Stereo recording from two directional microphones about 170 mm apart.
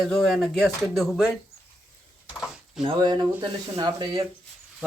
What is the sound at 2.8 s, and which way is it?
Speech, 30° right (ahead or behind).